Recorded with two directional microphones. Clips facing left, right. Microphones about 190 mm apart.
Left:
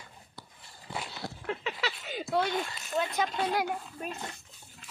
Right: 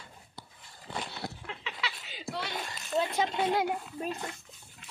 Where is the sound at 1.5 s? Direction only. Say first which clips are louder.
Left 6 dB; 45° left (ahead or behind).